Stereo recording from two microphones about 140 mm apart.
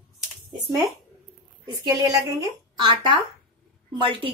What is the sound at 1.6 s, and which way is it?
A woman's voice, 25° right (ahead or behind).